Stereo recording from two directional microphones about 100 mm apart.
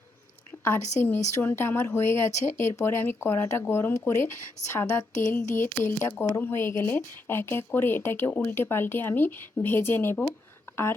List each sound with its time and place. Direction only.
0.6 s a woman's voice: 20° left (ahead or behind)